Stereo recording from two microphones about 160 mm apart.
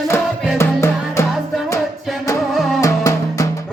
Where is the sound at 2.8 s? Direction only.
20° left (ahead or behind).